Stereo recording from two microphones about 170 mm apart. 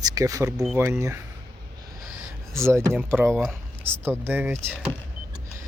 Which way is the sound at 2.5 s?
15° right (ahead or behind).